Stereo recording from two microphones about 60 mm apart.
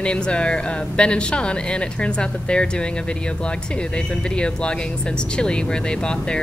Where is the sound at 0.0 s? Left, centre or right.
Centre.